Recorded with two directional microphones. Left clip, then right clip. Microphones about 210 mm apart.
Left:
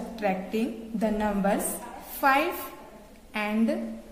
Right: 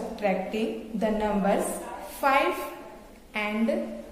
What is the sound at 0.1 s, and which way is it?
A woman's voice, 30° left (ahead or behind).